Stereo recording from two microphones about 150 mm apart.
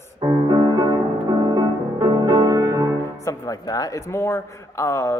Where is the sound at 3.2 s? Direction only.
20° left (ahead or behind).